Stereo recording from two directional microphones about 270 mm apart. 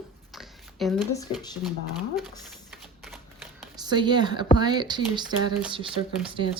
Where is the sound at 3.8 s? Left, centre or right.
Centre.